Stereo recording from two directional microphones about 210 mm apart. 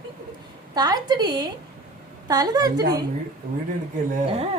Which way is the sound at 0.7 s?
20° right (ahead or behind).